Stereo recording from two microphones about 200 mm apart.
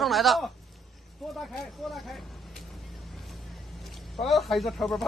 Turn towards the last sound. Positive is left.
turn(degrees=0)  # may be behind; listen again after turning